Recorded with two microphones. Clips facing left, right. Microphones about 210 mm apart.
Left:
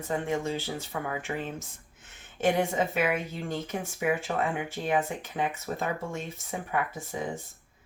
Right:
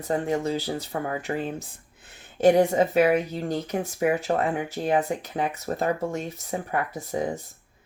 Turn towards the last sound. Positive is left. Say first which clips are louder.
# right 4 dB
turn(degrees=-35)  # may be behind; listen again after turning